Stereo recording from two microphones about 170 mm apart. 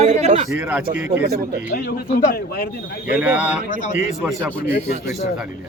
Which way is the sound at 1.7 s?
60° left (ahead or behind).